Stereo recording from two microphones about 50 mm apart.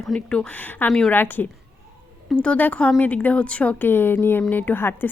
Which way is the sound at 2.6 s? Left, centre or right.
Left.